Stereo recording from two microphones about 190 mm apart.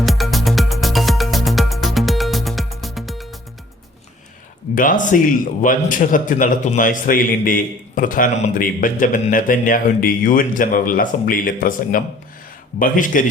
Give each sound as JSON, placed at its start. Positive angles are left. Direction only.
{"t": 0.0, "sound": "music", "side_deg": 0}
{"t": 4.7, "sound": "a man's voice", "side_deg": 45}